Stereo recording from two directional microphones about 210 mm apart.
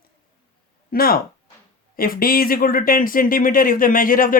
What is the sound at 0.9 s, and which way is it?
Speech, 45° left (ahead or behind).